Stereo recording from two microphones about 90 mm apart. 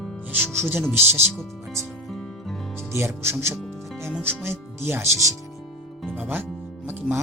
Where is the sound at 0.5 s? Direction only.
25° right (ahead or behind).